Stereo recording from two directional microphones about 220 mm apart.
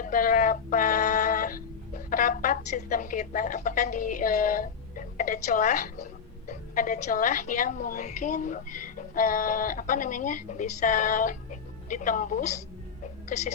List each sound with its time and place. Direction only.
0.0 s music: 40° left (ahead or behind)
6.5 s a woman's voice: 35° left (ahead or behind)